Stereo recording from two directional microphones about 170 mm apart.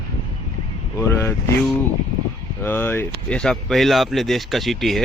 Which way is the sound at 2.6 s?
15° left (ahead or behind).